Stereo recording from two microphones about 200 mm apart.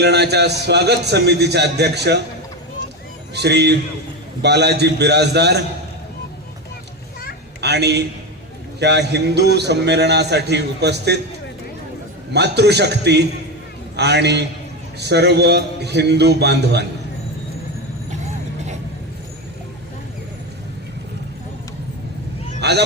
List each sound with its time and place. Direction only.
0.0 s a man's voice: 55° right (ahead or behind)
3.3 s a man's voice: 55° right (ahead or behind)
7.6 s a man's voice: 55° right (ahead or behind)
12.3 s a man's voice: 55° right (ahead or behind)
22.6 s vehicle: 55° right (ahead or behind)